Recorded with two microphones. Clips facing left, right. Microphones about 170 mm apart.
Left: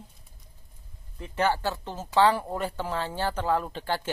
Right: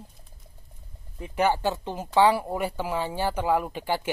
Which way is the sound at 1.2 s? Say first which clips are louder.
Right 2 dB; 15° right (ahead or behind).